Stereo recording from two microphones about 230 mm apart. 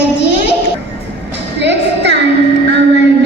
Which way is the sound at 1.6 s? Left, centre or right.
Right.